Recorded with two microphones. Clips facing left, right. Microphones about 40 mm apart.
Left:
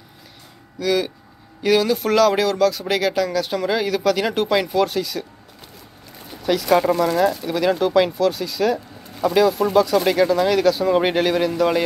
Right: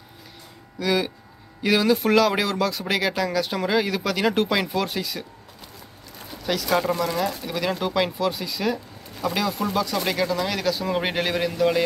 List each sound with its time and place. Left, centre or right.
0.7 s speech: centre
6.4 s speech: centre
6.8 s speech: left
7.4 s speech: centre